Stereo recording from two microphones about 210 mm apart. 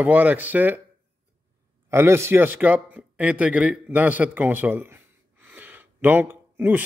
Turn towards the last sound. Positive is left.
turn(degrees=-10)  # may be behind; listen again after turning